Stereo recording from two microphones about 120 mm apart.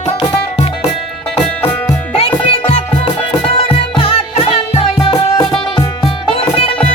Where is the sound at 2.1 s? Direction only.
55° left (ahead or behind).